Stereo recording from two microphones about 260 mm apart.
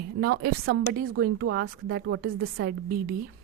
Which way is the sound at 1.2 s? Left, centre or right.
Right.